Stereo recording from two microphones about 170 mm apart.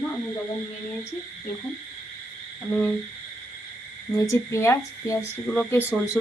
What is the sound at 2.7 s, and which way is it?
Speech, 10° left (ahead or behind).